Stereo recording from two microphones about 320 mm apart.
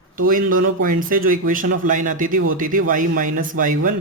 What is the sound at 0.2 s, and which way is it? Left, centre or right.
Speech, right.